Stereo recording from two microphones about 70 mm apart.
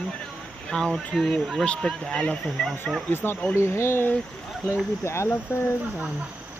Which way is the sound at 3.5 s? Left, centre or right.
Left.